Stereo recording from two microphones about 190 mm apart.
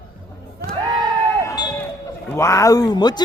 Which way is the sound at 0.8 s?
20° right (ahead or behind).